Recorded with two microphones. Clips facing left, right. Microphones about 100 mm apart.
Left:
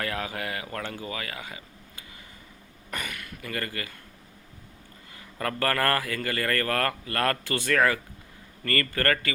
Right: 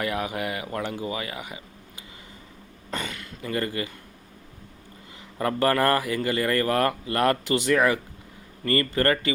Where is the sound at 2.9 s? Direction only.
25° right (ahead or behind).